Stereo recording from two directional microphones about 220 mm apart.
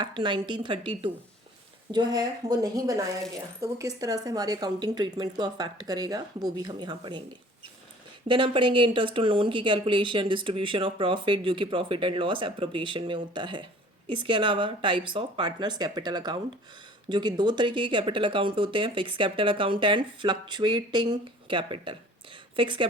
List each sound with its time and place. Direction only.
0.0 s speech: 20° right (ahead or behind)
8.3 s speech: 25° right (ahead or behind)